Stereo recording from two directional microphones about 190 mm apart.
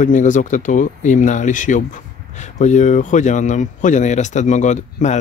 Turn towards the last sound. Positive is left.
turn(degrees=40)  # may be behind; listen again after turning